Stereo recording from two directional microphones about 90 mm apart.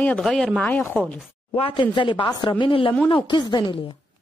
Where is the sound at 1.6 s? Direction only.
65° left (ahead or behind).